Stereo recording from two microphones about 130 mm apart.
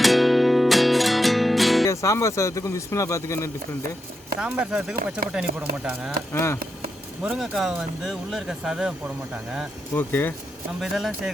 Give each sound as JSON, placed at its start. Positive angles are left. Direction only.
{"t": 0.0, "sound": "music", "side_deg": 0}
{"t": 1.9, "sound": "speech", "side_deg": 25}
{"t": 4.4, "sound": "speech", "side_deg": -5}
{"t": 6.3, "sound": "speech", "side_deg": 20}
{"t": 7.2, "sound": "speech", "side_deg": -5}
{"t": 9.9, "sound": "speech", "side_deg": 15}
{"t": 10.8, "sound": "speech", "side_deg": 0}